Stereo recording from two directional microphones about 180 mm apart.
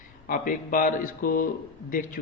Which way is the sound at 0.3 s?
50° left (ahead or behind).